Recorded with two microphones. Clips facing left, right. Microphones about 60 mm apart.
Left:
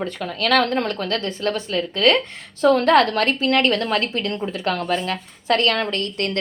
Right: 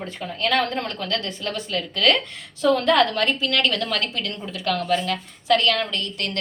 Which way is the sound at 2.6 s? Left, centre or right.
Left.